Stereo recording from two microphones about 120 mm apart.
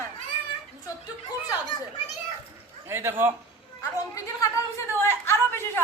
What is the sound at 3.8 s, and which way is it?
Speech, 25° left (ahead or behind).